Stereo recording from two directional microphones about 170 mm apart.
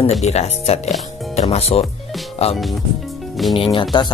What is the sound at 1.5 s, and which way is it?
Speech, 35° left (ahead or behind).